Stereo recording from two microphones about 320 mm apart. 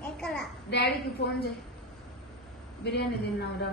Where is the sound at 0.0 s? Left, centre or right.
Centre.